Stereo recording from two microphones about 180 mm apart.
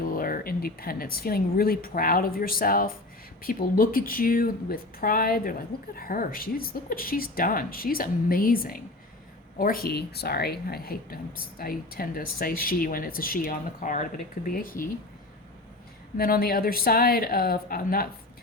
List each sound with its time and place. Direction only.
0.0 s a woman's voice: 50° left (ahead or behind)
16.1 s speech: 55° left (ahead or behind)